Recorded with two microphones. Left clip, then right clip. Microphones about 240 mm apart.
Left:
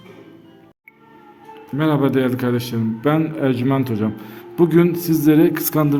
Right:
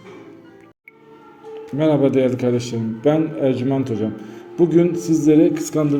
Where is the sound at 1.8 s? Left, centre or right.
Left.